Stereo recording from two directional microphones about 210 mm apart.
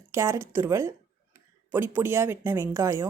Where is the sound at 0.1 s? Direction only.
15° right (ahead or behind).